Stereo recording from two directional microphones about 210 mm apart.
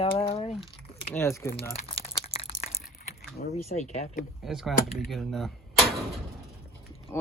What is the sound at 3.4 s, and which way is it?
Speech, 35° left (ahead or behind).